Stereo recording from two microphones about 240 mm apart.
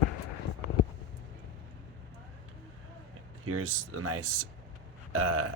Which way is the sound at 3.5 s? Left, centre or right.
Right.